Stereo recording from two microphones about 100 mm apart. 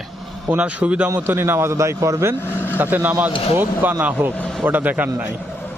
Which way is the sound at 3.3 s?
65° left (ahead or behind).